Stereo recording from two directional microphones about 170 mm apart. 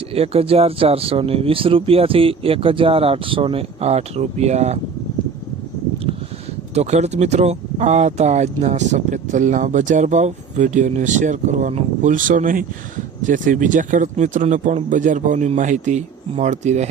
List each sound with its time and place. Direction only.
0.1 s speech: 35° right (ahead or behind)
6.7 s speech: 40° right (ahead or behind)